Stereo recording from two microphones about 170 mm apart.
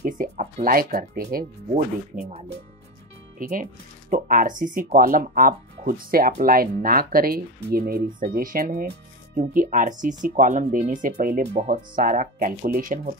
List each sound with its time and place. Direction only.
0.0 s speech: 50° right (ahead or behind)
2.1 s speech: 40° right (ahead or behind)
3.3 s speech: 55° right (ahead or behind)